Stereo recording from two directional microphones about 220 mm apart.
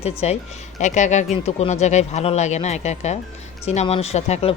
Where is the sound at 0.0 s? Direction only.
30° left (ahead or behind).